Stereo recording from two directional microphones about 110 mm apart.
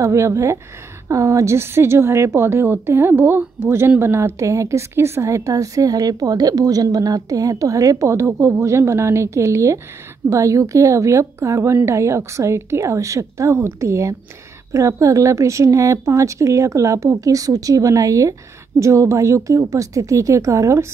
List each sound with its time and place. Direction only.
0.0 s a woman's voice: 25° right (ahead or behind)